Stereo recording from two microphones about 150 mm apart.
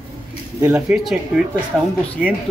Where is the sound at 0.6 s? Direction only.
15° right (ahead or behind).